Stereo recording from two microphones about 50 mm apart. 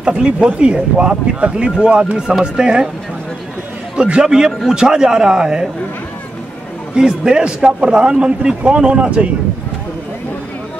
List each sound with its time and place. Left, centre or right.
0.0 s speech: centre
3.9 s speech: centre
7.0 s speech: centre